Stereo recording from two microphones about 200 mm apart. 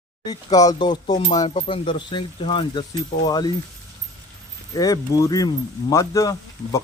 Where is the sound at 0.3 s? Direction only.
20° left (ahead or behind).